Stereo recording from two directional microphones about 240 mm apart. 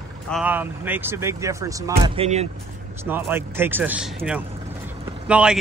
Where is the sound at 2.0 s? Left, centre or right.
Right.